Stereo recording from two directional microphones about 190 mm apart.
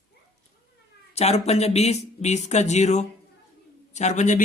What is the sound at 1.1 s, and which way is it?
Speech, 35° left (ahead or behind).